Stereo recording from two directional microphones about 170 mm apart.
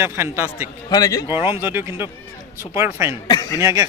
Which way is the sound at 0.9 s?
20° left (ahead or behind).